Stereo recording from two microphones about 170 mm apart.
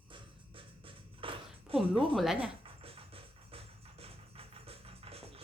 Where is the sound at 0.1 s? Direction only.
30° right (ahead or behind).